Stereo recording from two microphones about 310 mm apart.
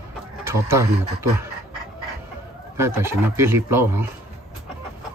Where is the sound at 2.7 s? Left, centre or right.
Centre.